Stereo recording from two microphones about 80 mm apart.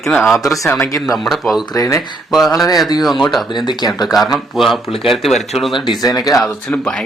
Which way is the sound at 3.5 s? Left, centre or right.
Left.